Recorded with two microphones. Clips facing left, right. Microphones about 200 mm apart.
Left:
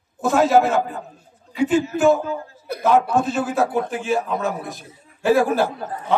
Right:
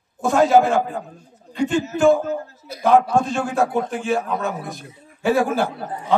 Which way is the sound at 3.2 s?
5° left (ahead or behind).